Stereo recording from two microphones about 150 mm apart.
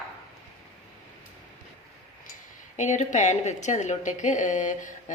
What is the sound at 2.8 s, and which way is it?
A woman's voice, 50° left (ahead or behind).